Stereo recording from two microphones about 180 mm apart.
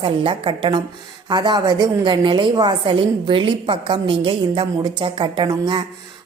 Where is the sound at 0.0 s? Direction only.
30° right (ahead or behind).